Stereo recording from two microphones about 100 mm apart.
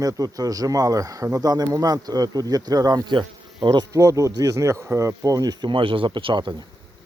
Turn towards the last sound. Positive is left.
turn(degrees=-55)  # may be behind; listen again after turning